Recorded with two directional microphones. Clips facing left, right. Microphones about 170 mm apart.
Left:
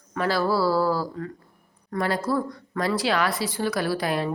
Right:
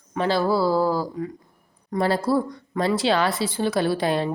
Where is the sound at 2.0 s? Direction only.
30° right (ahead or behind).